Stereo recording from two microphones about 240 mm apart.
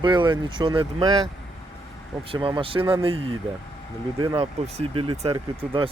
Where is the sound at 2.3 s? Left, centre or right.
Centre.